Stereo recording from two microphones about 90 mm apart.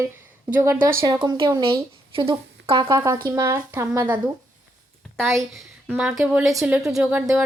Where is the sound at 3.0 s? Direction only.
35° right (ahead or behind).